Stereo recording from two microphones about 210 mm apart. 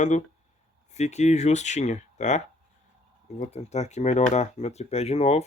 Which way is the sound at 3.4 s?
30° left (ahead or behind).